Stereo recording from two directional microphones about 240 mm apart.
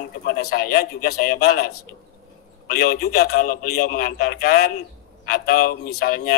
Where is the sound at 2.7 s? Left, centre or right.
Left.